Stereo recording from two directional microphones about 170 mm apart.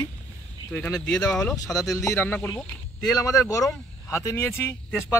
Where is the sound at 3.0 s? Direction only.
20° left (ahead or behind).